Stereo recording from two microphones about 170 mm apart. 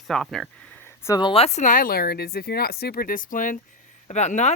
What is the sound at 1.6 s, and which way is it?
Speech, 55° left (ahead or behind).